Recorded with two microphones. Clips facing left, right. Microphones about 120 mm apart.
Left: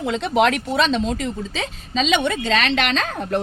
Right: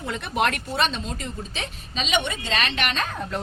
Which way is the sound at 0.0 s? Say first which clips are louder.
Left 7 dB; 85° left.